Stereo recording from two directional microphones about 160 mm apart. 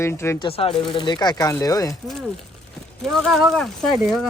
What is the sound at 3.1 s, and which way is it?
Speech, centre (ahead or behind).